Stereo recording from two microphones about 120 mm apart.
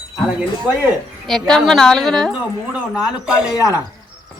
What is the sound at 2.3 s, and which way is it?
Speech, 10° right (ahead or behind).